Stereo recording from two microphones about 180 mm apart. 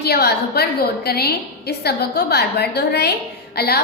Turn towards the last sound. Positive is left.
turn(degrees=60)  # may be behind; listen again after turning